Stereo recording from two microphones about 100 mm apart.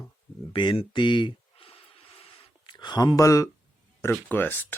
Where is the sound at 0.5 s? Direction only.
55° left (ahead or behind).